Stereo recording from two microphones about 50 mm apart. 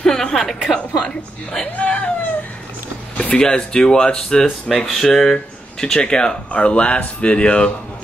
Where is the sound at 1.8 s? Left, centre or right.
Left.